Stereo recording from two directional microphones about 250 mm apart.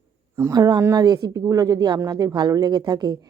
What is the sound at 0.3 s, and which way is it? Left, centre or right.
Speech, centre.